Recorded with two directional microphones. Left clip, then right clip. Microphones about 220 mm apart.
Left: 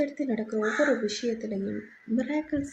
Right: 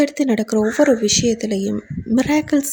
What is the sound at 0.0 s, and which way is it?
Speech, 50° right (ahead or behind).